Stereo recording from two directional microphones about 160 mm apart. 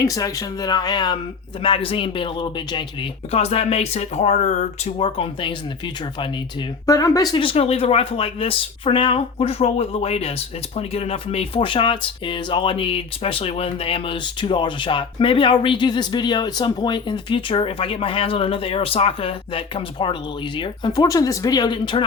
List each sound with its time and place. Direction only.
0.0 s speech: 20° left (ahead or behind)